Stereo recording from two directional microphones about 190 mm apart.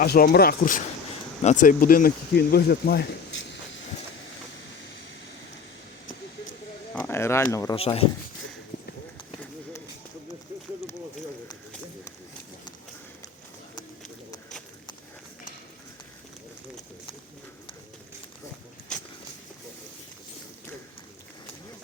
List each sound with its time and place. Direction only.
0.0 s speech: 50° left (ahead or behind)
7.0 s speech: 15° left (ahead or behind)
7.8 s speech: 30° left (ahead or behind)
18.9 s a sound: 5° left (ahead or behind)